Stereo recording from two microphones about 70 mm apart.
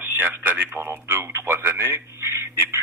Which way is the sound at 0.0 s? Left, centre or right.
Right.